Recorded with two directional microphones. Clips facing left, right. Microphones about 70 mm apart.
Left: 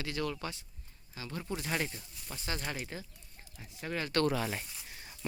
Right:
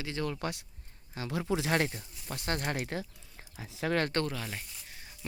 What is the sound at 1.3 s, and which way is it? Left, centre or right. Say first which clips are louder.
Speech: right 7 dB; right.